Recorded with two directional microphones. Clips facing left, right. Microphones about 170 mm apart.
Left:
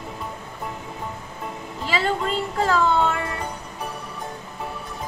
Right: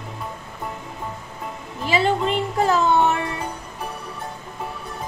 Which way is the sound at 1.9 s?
20° right (ahead or behind).